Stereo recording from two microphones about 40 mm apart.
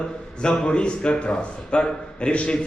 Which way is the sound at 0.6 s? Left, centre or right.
Left.